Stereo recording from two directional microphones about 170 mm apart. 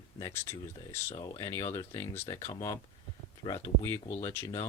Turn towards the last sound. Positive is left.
turn(degrees=15)  # may be behind; listen again after turning